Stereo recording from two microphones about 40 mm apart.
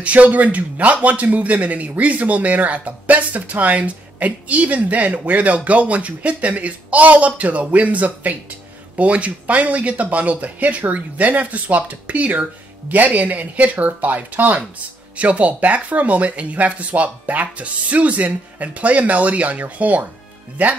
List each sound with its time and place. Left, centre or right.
0.0 s speech: right